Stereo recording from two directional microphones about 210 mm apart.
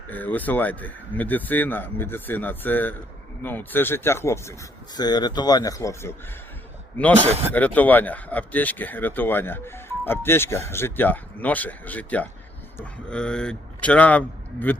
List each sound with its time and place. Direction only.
0.1 s speech: 10° left (ahead or behind)
7.2 s speech: 30° right (ahead or behind)
7.5 s a man's voice: 5° left (ahead or behind)